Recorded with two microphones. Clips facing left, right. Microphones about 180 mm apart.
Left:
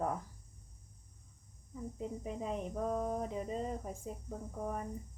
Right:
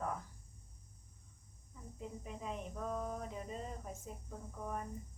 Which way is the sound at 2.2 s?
30° left (ahead or behind).